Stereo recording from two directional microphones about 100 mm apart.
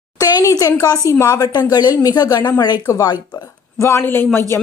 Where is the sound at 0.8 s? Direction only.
35° left (ahead or behind).